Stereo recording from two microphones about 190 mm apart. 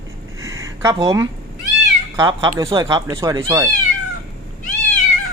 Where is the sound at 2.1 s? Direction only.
25° right (ahead or behind).